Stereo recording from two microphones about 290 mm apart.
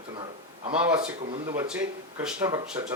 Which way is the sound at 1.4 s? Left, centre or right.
Centre.